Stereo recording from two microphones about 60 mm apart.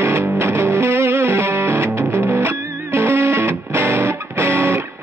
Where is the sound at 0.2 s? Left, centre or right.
Right.